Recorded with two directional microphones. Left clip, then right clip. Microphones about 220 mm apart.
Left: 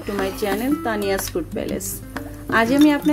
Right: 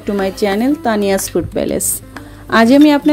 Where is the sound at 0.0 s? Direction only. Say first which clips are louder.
Right 7 dB; 30° right (ahead or behind).